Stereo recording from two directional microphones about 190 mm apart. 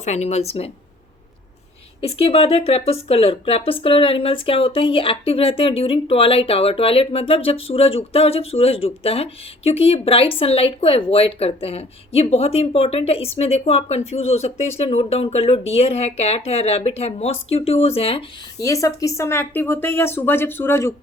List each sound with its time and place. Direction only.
0.0 s speech: 35° left (ahead or behind)
2.0 s speech: 30° left (ahead or behind)
18.6 s speech: 15° left (ahead or behind)